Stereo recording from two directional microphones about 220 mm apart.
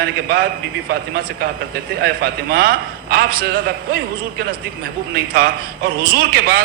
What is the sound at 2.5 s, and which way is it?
Speech, 45° right (ahead or behind).